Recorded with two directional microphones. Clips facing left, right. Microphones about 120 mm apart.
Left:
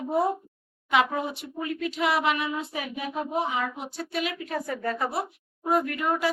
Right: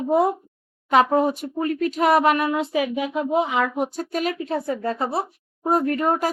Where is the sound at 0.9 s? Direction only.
40° right (ahead or behind).